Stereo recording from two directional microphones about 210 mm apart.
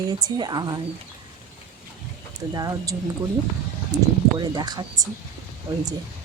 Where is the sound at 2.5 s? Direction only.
15° right (ahead or behind).